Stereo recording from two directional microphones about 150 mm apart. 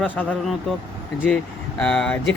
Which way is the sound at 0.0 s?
5° left (ahead or behind).